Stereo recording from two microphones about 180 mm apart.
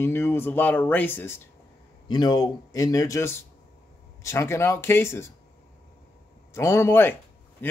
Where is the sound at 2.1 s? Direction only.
25° left (ahead or behind).